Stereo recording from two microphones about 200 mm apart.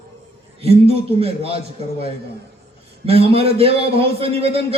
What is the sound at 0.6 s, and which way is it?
A man's voice, 30° right (ahead or behind).